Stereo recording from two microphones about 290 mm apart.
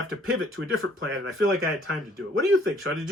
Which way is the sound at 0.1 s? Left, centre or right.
Right.